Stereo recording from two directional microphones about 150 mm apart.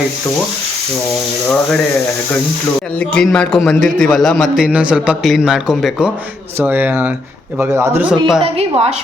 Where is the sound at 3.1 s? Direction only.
5° left (ahead or behind); by 8.1 s 20° right (ahead or behind).